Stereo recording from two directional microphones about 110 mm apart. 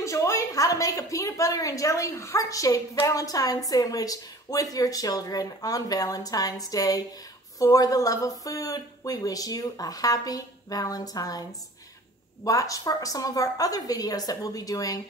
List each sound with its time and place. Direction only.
0.0 s a woman's voice: 30° left (ahead or behind)
12.4 s a woman's voice: 30° left (ahead or behind)